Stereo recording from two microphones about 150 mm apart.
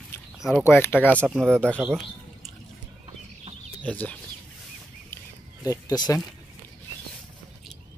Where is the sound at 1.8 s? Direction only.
5° right (ahead or behind).